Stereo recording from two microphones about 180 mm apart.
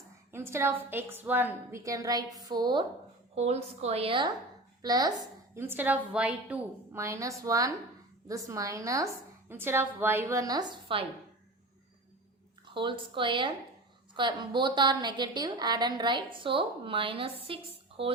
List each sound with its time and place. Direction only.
0.3 s a woman's voice: 15° right (ahead or behind)
3.3 s a woman's voice: 35° right (ahead or behind)
5.5 s a woman's voice: 10° right (ahead or behind)
12.6 s a woman's voice: 25° right (ahead or behind)